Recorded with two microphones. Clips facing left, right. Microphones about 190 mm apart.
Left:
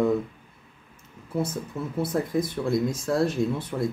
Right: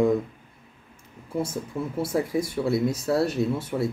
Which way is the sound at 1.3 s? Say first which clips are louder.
Even; 10° right (ahead or behind).